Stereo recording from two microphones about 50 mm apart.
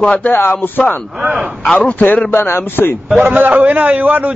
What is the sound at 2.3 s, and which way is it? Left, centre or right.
Speech, left.